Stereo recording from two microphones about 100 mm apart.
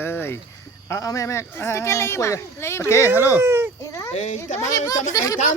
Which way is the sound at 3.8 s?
35° left (ahead or behind).